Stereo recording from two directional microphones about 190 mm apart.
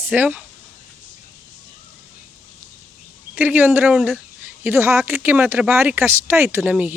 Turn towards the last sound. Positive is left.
turn(degrees=-10)  # may be behind; listen again after turning